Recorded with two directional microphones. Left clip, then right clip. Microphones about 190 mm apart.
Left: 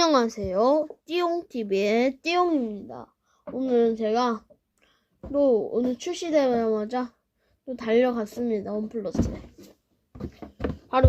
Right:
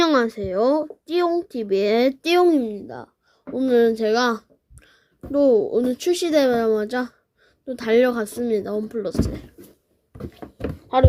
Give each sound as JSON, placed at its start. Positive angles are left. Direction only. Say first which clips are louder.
{"t": 0.0, "sound": "speech", "louder": "right 3 dB", "side_deg": -15}
{"t": 3.5, "sound": "speech", "louder": "right 5 dB", "side_deg": -35}